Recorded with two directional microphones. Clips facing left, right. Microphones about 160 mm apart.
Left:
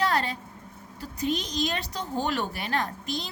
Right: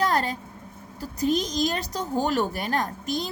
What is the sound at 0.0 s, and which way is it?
Vehicle, 45° right (ahead or behind).